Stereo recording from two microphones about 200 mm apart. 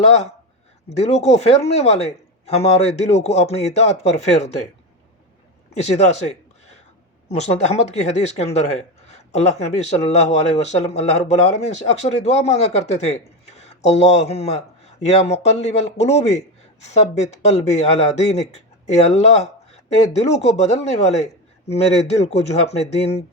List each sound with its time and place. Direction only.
0.9 s speech: 35° left (ahead or behind)
5.8 s speech: 35° left (ahead or behind)
7.3 s speech: 35° left (ahead or behind)